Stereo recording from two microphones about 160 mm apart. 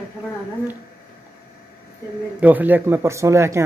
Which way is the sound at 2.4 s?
10° right (ahead or behind).